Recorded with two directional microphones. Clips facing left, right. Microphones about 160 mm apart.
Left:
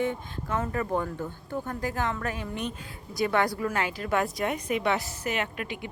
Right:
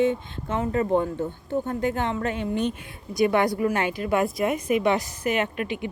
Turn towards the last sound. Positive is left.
turn(degrees=-20)  # may be behind; listen again after turning